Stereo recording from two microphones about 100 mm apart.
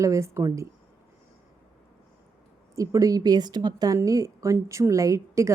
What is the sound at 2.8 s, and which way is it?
A woman's voice, 35° right (ahead or behind).